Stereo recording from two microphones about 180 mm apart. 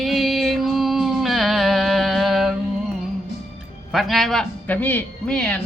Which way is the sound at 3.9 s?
Centre (ahead or behind).